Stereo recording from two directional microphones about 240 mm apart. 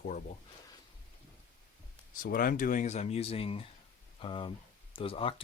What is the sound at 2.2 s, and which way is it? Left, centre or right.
Speech, left.